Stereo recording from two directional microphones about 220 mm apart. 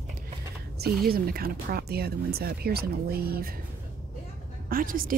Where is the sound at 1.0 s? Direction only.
40° right (ahead or behind).